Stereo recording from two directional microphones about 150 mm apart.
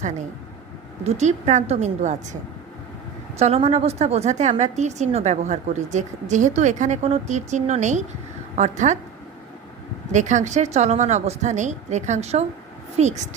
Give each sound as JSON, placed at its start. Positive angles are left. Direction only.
{"t": 1.0, "sound": "a woman's voice", "side_deg": -45}
{"t": 3.3, "sound": "a woman's voice", "side_deg": -45}
{"t": 10.1, "sound": "a woman's voice", "side_deg": -55}